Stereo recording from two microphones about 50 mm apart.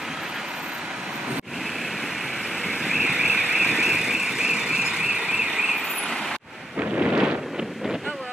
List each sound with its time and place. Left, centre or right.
2.7 s vehicle: centre
3.0 s vehicle: centre
6.8 s a sound: right